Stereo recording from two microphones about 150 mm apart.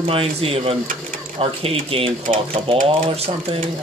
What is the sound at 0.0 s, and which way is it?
Speech, 40° right (ahead or behind).